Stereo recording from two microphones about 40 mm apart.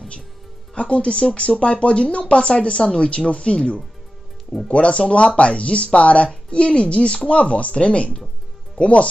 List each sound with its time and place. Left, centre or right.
0.7 s speech: left